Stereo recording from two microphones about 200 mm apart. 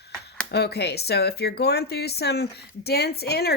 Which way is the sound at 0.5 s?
55° left (ahead or behind).